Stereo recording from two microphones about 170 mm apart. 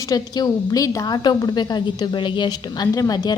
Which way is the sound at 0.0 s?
20° left (ahead or behind).